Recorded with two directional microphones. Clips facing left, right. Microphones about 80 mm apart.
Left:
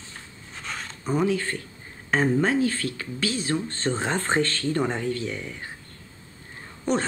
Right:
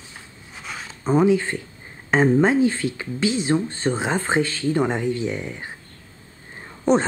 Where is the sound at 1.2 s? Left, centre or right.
Centre.